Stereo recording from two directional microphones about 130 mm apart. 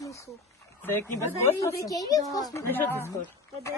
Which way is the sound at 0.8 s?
15° left (ahead or behind).